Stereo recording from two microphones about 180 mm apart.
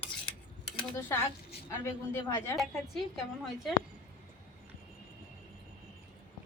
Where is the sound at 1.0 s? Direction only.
10° left (ahead or behind).